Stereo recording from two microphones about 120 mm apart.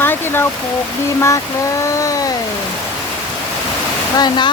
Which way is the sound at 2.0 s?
30° left (ahead or behind).